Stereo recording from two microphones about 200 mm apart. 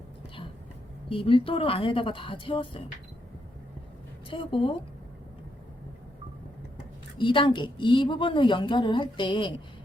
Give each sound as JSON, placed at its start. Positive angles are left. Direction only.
{"t": 1.1, "sound": "a woman's voice", "side_deg": 25}
{"t": 4.3, "sound": "a woman's voice", "side_deg": 25}
{"t": 7.2, "sound": "a woman's voice", "side_deg": 25}